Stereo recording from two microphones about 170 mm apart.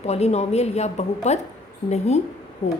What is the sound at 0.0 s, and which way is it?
A woman's voice, 40° left (ahead or behind).